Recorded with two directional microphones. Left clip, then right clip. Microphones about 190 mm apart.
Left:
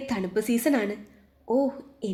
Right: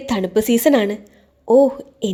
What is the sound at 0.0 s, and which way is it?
A woman's voice, 40° right (ahead or behind).